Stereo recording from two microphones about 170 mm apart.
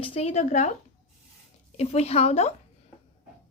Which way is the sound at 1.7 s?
40° left (ahead or behind).